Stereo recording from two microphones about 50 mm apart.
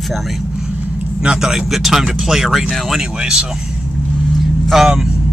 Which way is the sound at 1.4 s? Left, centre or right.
Centre.